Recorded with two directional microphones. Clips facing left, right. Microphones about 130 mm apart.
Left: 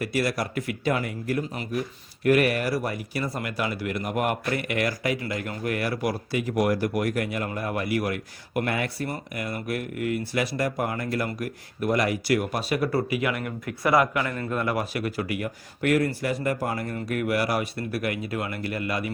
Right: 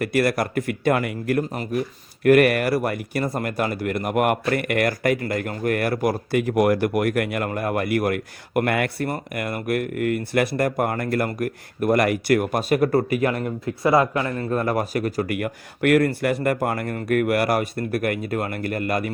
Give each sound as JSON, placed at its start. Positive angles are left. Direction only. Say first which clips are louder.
{"t": 0.0, "sound": "speech", "louder": "right 5 dB", "side_deg": -60}
{"t": 15.4, "sound": "speech", "louder": "right 5 dB", "side_deg": -60}